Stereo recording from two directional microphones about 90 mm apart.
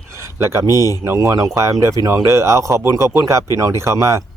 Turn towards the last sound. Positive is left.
turn(degrees=-35)  # may be behind; listen again after turning